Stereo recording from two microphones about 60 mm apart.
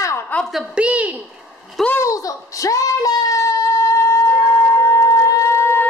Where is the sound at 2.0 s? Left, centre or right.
Left.